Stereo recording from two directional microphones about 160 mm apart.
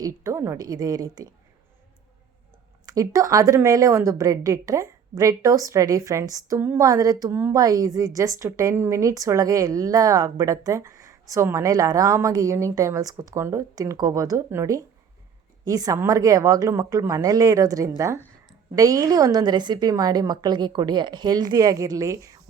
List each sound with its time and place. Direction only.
0.0 s a woman's voice: 20° right (ahead or behind)
2.8 s a woman's voice: 20° right (ahead or behind)